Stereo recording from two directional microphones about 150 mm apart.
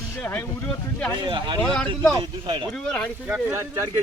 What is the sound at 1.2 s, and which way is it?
Speech, 30° right (ahead or behind).